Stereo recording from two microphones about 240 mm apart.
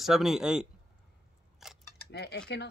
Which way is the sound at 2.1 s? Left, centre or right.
Left.